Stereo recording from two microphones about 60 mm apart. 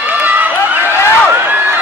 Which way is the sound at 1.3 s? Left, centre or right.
Right.